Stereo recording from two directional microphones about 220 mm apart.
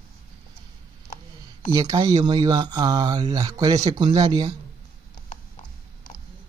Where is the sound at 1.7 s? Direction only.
15° right (ahead or behind).